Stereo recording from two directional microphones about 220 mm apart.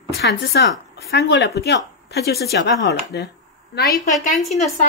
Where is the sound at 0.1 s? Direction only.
50° left (ahead or behind).